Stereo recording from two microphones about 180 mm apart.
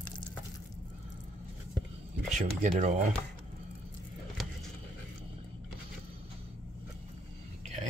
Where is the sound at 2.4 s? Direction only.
40° right (ahead or behind).